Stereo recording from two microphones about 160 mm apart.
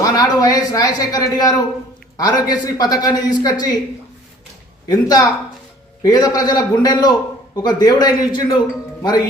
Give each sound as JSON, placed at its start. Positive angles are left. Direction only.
{"t": 0.0, "sound": "a man's voice", "side_deg": 25}
{"t": 4.9, "sound": "a man's voice", "side_deg": 25}